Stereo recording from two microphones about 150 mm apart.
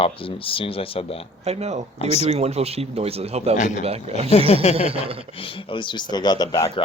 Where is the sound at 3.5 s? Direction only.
55° left (ahead or behind).